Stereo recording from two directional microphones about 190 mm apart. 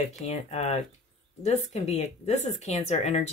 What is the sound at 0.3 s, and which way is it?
Speech, 35° left (ahead or behind).